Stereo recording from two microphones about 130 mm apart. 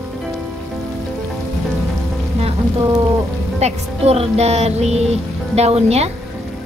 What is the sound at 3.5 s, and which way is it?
Music, 55° right (ahead or behind).